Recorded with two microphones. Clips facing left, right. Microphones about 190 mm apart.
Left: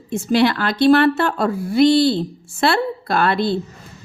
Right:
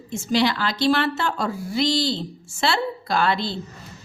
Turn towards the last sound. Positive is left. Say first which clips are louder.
# left 5 dB
turn(degrees=55)  # may be behind; listen again after turning